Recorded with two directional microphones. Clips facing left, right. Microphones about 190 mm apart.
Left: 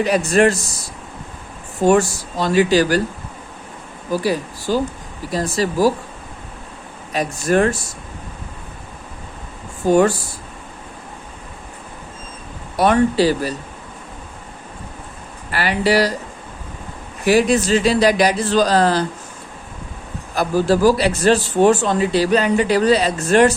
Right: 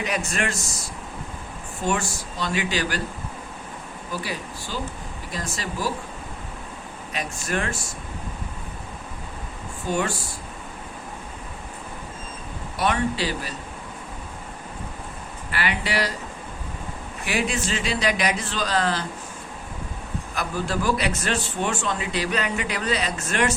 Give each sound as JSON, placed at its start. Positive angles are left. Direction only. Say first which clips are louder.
{"t": 0.0, "sound": "a man's voice", "louder": "left 12 dB", "side_deg": 35}
{"t": 1.8, "sound": "a man's voice", "louder": "left 12 dB", "side_deg": 40}
{"t": 4.1, "sound": "a man's voice", "louder": "left 12 dB", "side_deg": 40}
{"t": 7.1, "sound": "a man's voice", "louder": "left 11 dB", "side_deg": 40}
{"t": 12.7, "sound": "a man's voice", "louder": "left 9 dB", "side_deg": 40}
{"t": 15.5, "sound": "a man's voice", "louder": "left 9 dB", "side_deg": 40}
{"t": 17.2, "sound": "a man's voice", "louder": "left 11 dB", "side_deg": 40}
{"t": 20.3, "sound": "a man's voice", "louder": "left 11 dB", "side_deg": 35}